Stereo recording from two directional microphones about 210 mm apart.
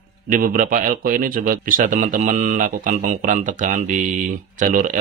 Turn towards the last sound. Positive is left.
turn(degrees=-40)  # may be behind; listen again after turning